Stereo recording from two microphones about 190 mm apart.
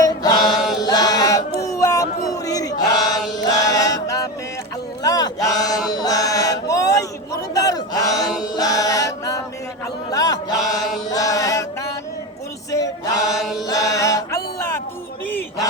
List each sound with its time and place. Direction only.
0.0 s chant: 20° left (ahead or behind)
5.0 s a sound: 20° left (ahead or behind)
5.9 s chant: 20° left (ahead or behind)
8.4 s music: 20° left (ahead or behind)
10.1 s chant: 20° left (ahead or behind)
13.7 s music: 20° left (ahead or behind)
15.3 s chant: 10° left (ahead or behind)